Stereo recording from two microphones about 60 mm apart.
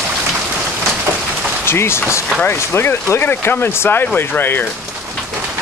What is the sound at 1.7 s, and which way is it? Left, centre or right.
Speech, left.